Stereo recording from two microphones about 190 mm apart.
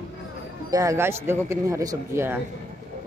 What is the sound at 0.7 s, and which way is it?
Speech, 15° right (ahead or behind).